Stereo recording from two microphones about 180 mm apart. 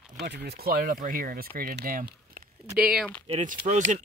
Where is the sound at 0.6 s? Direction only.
55° right (ahead or behind).